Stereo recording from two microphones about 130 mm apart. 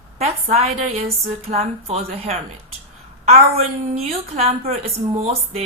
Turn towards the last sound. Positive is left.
turn(degrees=-55)  # may be behind; listen again after turning